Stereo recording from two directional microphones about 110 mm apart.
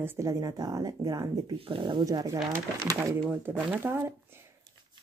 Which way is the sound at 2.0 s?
30° right (ahead or behind).